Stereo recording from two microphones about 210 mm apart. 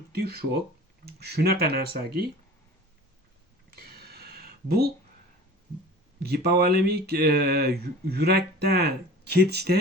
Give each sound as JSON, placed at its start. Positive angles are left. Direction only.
{"t": 0.1, "sound": "speech", "side_deg": -45}
{"t": 3.7, "sound": "a sound", "side_deg": -45}
{"t": 6.1, "sound": "speech", "side_deg": -50}